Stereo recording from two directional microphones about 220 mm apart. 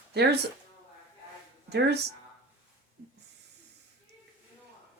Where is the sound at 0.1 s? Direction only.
50° right (ahead or behind).